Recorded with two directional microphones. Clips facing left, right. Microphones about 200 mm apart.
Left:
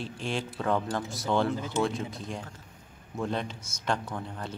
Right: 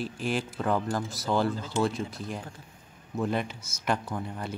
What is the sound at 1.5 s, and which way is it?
Speech, 20° left (ahead or behind).